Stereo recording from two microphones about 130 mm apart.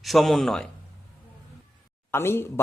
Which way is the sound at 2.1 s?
20° left (ahead or behind).